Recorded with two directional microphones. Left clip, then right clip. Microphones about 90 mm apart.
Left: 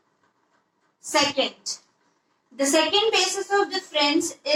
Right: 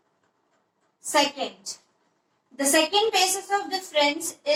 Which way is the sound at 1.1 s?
35° left (ahead or behind).